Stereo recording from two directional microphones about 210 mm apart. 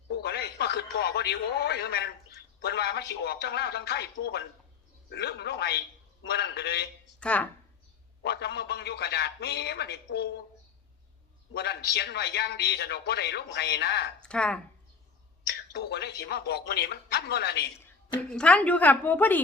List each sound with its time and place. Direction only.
0.1 s radio: 50° left (ahead or behind)
0.9 s a man's voice: 50° left (ahead or behind)
7.2 s speech: 5° left (ahead or behind)
8.2 s a man's voice: 50° left (ahead or behind)
11.5 s a man's voice: 50° left (ahead or behind)
14.2 s speech: 5° left (ahead or behind)
15.7 s a man's voice: 50° left (ahead or behind)
18.3 s a woman's voice: 5° left (ahead or behind)